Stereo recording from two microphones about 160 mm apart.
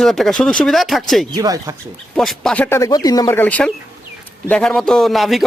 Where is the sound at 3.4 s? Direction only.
10° left (ahead or behind).